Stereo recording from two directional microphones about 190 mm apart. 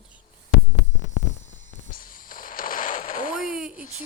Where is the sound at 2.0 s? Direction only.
45° left (ahead or behind).